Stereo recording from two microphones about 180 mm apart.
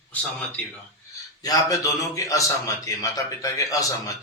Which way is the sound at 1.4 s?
20° left (ahead or behind).